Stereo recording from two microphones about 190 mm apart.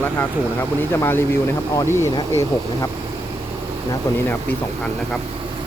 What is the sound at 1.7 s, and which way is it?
Speech, 15° left (ahead or behind).